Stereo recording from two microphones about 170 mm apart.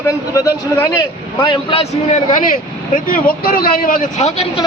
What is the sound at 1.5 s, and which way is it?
Speech, 35° left (ahead or behind).